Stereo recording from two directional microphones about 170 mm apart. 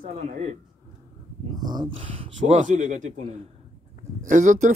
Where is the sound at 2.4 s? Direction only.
50° right (ahead or behind).